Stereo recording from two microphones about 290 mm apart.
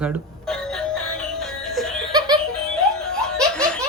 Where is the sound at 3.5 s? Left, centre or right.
Centre.